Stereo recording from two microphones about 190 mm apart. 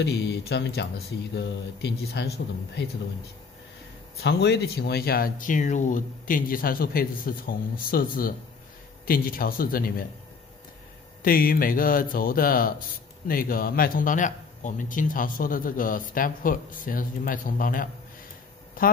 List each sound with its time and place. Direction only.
0.0 s a man's voice: 60° left (ahead or behind)
4.2 s a man's voice: 60° left (ahead or behind)
11.2 s a man's voice: 50° left (ahead or behind)